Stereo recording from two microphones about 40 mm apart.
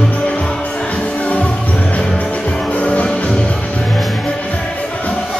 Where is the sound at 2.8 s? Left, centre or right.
Left.